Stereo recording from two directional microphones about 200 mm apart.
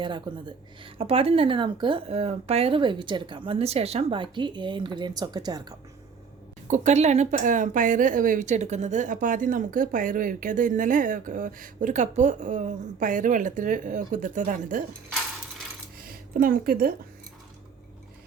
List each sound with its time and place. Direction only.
0.0 s a woman's voice: 25° right (ahead or behind)
6.7 s speech: 35° right (ahead or behind)
16.0 s a sound: 45° right (ahead or behind)